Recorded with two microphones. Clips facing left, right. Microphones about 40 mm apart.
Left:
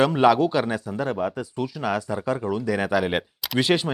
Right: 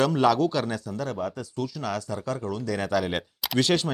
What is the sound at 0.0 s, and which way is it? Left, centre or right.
Speech, left.